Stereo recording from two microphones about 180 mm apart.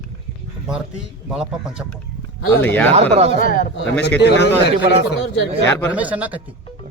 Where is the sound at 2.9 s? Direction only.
35° right (ahead or behind).